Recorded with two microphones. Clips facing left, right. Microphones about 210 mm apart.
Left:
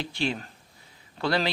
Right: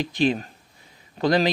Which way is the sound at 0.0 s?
15° right (ahead or behind).